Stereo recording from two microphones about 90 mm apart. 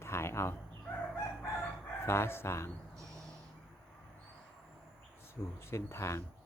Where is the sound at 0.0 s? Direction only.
30° left (ahead or behind).